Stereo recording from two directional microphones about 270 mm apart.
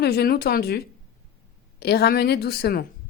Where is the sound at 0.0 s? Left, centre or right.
Left.